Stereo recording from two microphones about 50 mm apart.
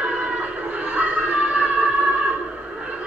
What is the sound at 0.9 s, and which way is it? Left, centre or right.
Music, right.